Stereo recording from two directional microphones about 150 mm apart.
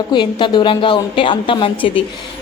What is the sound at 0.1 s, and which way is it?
A woman's voice, 30° left (ahead or behind).